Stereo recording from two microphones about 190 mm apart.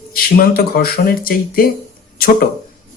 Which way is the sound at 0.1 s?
50° left (ahead or behind).